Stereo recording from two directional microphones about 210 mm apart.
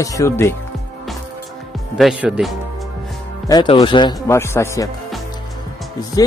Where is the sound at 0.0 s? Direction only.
15° left (ahead or behind).